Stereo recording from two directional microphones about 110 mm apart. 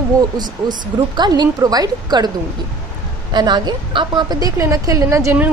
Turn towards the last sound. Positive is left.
turn(degrees=-30)  # may be behind; listen again after turning